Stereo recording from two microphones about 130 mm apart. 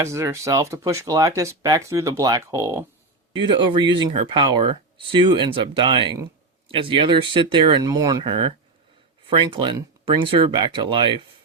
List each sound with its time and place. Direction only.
0.0 s speech: 20° right (ahead or behind)
3.3 s speech: 40° right (ahead or behind)
9.2 s speech: 40° right (ahead or behind)